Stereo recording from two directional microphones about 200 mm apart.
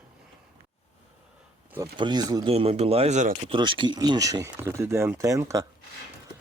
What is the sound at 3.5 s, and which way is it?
Speech, 25° right (ahead or behind).